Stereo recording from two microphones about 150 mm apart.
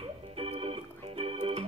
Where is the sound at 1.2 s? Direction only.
40° right (ahead or behind).